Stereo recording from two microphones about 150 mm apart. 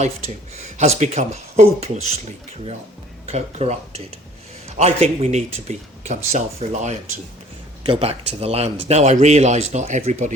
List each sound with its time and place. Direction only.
0.8 s a man's voice: 50° right (ahead or behind)
3.2 s a man's voice: 45° right (ahead or behind)